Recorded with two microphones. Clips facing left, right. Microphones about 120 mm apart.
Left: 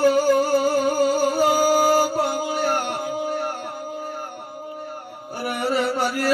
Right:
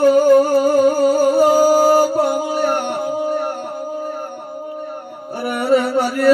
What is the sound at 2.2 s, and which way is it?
Music, 55° right (ahead or behind).